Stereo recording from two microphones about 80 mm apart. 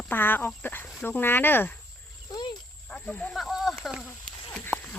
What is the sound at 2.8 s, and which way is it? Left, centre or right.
Speech, centre.